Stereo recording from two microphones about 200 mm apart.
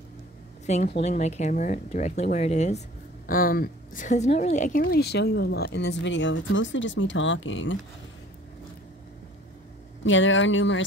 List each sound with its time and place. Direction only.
0.7 s speech: 35° left (ahead or behind)
3.3 s a woman's voice: 45° left (ahead or behind); by 7.8 s 70° left (ahead or behind)
10.0 s speech: 70° left (ahead or behind)